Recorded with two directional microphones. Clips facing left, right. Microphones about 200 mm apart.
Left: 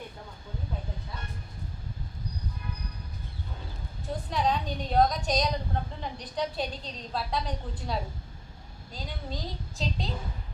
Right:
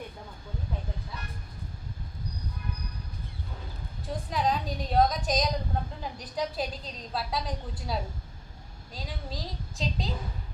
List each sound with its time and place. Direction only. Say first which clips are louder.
4.0 s a woman's voice: even; centre (ahead or behind)